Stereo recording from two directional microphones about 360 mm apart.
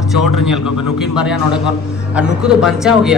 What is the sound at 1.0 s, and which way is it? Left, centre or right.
A man's voice, centre.